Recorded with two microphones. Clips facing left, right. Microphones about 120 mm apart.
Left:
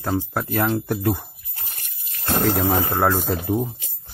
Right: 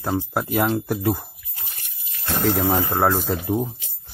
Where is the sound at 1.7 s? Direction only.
45° left (ahead or behind).